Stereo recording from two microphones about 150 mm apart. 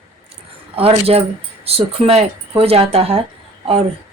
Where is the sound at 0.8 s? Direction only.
40° right (ahead or behind).